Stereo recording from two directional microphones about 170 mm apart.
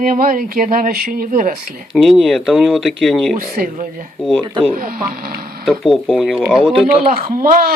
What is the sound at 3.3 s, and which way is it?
Speech, 55° right (ahead or behind).